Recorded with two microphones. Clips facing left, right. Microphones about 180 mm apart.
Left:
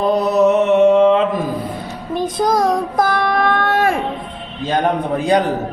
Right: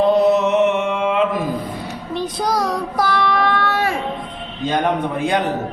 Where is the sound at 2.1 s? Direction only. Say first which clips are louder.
Left 4 dB; 50° left (ahead or behind).